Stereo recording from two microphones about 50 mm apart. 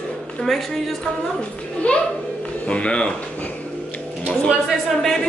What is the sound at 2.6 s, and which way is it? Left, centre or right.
Speech, left.